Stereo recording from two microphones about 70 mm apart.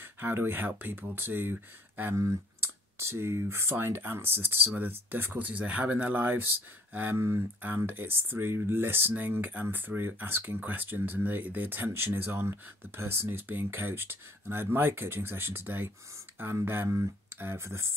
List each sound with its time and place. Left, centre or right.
0.0 s speech: right